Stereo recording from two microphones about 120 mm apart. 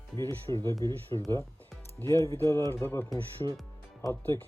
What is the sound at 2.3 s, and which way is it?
Speech, 25° left (ahead or behind).